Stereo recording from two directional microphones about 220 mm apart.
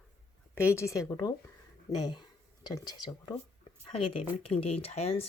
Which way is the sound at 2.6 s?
20° left (ahead or behind).